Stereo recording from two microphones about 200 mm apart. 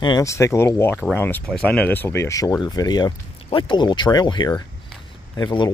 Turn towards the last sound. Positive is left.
turn(degrees=20)  # may be behind; listen again after turning